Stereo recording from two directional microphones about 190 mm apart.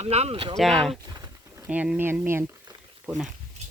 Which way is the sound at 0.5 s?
Centre (ahead or behind).